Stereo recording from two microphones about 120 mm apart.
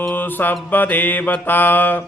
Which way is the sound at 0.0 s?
15° left (ahead or behind).